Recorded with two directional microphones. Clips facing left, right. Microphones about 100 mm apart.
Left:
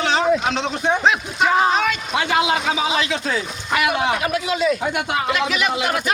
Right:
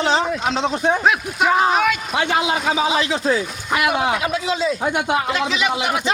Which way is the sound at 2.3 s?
35° right (ahead or behind).